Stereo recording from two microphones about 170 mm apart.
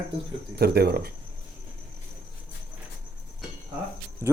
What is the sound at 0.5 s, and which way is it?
Speech, 70° right (ahead or behind).